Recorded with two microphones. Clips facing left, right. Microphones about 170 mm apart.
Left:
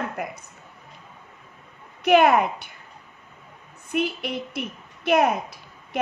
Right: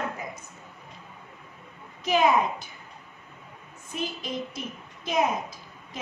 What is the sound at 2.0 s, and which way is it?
Speech, 65° left (ahead or behind).